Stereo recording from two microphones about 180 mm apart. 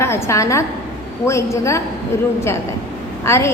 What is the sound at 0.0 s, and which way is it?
A woman's voice, 15° left (ahead or behind).